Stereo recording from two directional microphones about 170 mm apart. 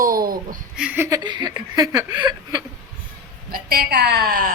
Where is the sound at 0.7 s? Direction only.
5° right (ahead or behind).